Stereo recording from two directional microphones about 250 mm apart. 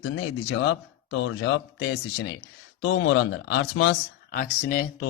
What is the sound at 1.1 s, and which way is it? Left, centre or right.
A man's voice, left.